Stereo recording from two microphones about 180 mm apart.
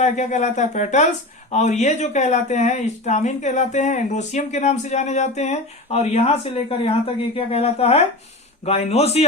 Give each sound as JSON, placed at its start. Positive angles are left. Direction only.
{"t": 0.0, "sound": "speech", "side_deg": 40}